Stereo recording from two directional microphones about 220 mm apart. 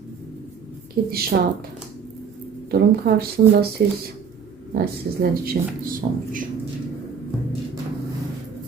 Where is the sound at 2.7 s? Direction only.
45° right (ahead or behind).